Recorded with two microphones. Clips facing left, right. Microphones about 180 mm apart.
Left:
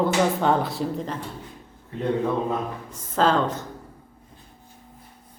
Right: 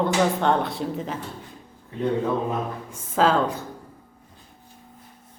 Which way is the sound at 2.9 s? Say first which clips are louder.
Right 1 dB; 10° right (ahead or behind).